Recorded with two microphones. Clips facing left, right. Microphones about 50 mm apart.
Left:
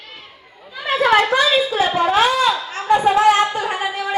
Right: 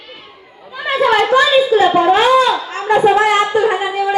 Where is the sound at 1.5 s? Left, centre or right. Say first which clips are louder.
Right 6 dB; centre.